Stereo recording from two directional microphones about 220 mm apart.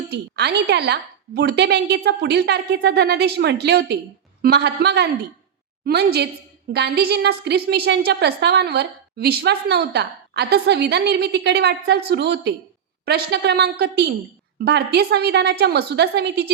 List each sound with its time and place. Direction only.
0.1 s a woman's voice: 50° right (ahead or behind)